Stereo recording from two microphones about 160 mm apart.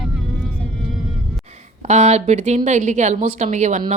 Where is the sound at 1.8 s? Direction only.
45° right (ahead or behind).